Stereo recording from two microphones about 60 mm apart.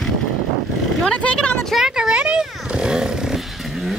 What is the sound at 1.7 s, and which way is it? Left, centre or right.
Chainsaw, centre.